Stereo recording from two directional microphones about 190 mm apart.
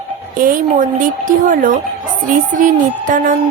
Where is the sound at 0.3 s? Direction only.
45° right (ahead or behind).